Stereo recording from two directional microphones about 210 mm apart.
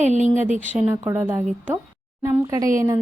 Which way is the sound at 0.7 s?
10° right (ahead or behind).